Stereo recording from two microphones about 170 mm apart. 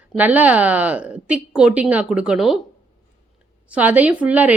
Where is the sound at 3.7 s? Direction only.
10° right (ahead or behind).